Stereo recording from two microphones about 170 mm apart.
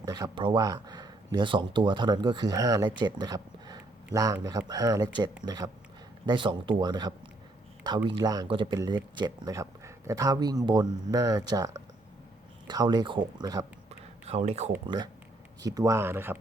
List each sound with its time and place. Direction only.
0.0 s speech: 20° right (ahead or behind)
14.3 s speech: 40° right (ahead or behind)
14.8 s speech: 25° right (ahead or behind)